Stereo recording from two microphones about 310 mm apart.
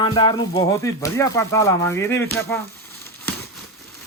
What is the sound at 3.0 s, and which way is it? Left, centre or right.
Crumpling, centre.